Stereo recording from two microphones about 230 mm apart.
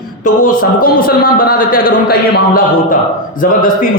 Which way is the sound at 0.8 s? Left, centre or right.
Left.